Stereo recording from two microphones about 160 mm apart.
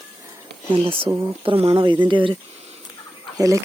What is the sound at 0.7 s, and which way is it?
Speech, 35° right (ahead or behind).